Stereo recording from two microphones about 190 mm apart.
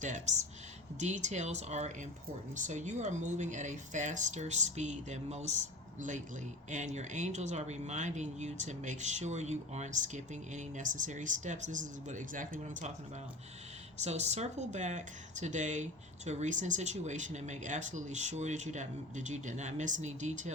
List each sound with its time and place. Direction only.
0.0 s speech: 40° right (ahead or behind)
14.0 s speech: 35° right (ahead or behind)